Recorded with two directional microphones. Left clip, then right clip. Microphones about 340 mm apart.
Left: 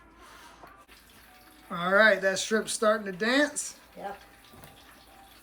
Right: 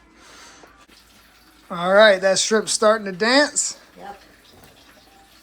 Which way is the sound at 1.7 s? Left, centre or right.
Centre.